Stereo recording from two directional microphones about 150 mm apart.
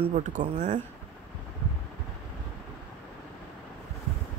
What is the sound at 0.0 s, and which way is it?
Speech, 55° right (ahead or behind).